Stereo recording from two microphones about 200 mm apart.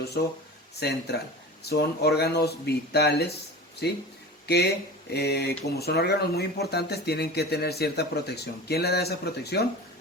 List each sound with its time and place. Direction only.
0.8 s speech: 55° left (ahead or behind)